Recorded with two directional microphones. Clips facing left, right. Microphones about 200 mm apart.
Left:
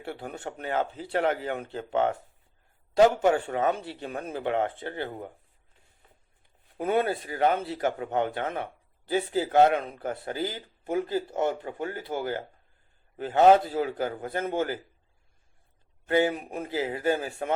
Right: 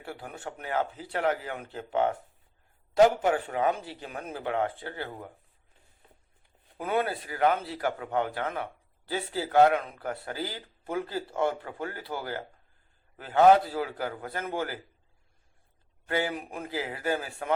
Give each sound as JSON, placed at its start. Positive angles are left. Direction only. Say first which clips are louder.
{"t": 0.0, "sound": "a man's voice", "louder": "left 3 dB", "side_deg": 25}
{"t": 3.2, "sound": "a man's voice", "louder": "left 3 dB", "side_deg": 30}
{"t": 6.7, "sound": "a man's voice", "louder": "left 3 dB", "side_deg": 25}
{"t": 16.0, "sound": "a man's voice", "louder": "left 6 dB", "side_deg": 25}